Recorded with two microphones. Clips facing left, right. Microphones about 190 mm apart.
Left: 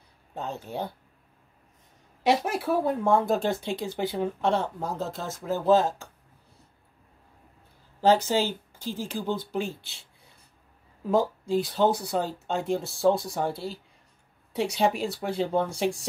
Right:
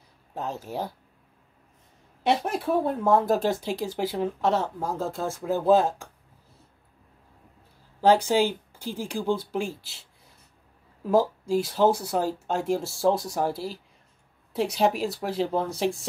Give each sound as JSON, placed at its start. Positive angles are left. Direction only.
{"t": 0.3, "sound": "speech", "side_deg": -5}
{"t": 2.2, "sound": "speech", "side_deg": 0}
{"t": 8.0, "sound": "speech", "side_deg": -10}
{"t": 11.1, "sound": "speech", "side_deg": -5}